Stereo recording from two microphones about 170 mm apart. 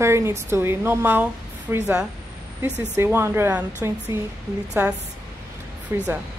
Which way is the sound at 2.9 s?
15° right (ahead or behind).